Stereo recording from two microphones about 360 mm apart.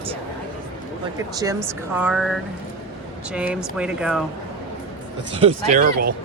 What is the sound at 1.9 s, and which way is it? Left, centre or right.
Speech, centre.